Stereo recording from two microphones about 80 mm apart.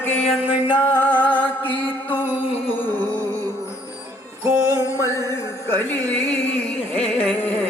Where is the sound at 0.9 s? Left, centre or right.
Left.